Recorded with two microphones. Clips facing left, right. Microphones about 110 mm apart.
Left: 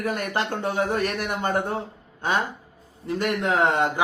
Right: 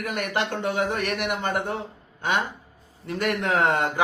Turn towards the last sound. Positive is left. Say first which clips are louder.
# left 1 dB
turn(degrees=25)  # may be behind; listen again after turning